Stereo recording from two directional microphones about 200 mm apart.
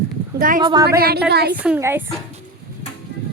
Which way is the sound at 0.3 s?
45° right (ahead or behind).